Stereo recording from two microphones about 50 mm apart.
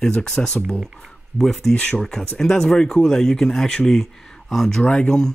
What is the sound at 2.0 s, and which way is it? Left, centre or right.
Speech, centre.